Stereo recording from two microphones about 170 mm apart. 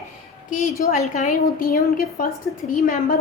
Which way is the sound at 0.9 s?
40° left (ahead or behind).